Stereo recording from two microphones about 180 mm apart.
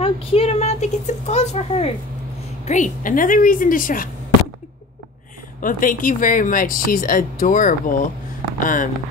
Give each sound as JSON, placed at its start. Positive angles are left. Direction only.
{"t": 0.0, "sound": "speech", "side_deg": 30}
{"t": 5.6, "sound": "speech", "side_deg": 50}